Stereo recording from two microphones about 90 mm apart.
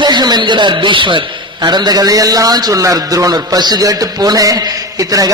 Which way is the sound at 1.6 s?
50° right (ahead or behind).